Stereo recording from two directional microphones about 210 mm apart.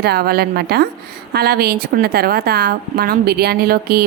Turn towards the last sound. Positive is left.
turn(degrees=-45)  # may be behind; listen again after turning